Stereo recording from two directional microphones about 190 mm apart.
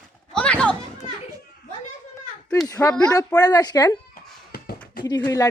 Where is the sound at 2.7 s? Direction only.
15° left (ahead or behind).